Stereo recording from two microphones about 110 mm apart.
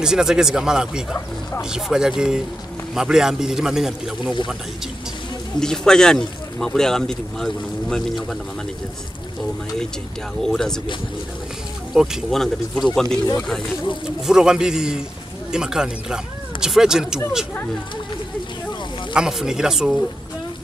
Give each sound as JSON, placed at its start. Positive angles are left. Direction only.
{"t": 0.0, "sound": "speech", "side_deg": -5}
{"t": 5.6, "sound": "speech", "side_deg": 5}
{"t": 10.4, "sound": "speech", "side_deg": 5}
{"t": 11.9, "sound": "speech", "side_deg": -5}
{"t": 14.0, "sound": "speech", "side_deg": -5}
{"t": 19.1, "sound": "speech", "side_deg": -5}